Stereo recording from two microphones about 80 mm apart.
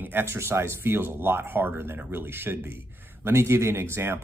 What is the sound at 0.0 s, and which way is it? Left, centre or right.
Speech, right.